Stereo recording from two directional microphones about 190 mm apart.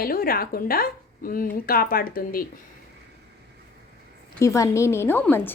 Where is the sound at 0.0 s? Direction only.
50° left (ahead or behind).